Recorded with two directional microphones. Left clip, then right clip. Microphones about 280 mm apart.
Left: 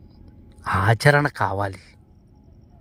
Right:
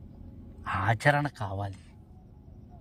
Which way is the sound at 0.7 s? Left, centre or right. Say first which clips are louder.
Left 8 dB; left.